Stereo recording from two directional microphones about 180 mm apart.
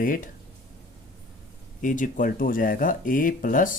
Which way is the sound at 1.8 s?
45° left (ahead or behind).